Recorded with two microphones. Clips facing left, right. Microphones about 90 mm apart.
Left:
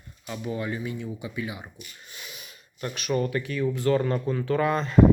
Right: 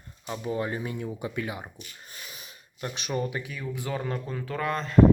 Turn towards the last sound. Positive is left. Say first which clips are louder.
# left 1 dB
turn(degrees=0)  # may be behind; listen again after turning